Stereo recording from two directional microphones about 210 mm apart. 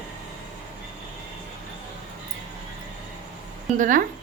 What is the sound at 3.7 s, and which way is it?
Speech, 40° right (ahead or behind).